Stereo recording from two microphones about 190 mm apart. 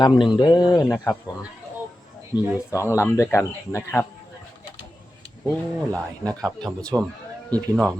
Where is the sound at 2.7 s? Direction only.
15° left (ahead or behind).